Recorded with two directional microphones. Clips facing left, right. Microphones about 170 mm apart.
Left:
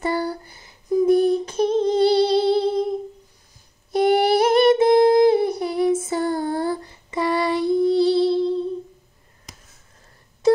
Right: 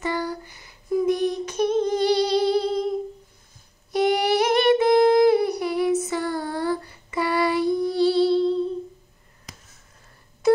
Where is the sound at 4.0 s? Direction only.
30° left (ahead or behind).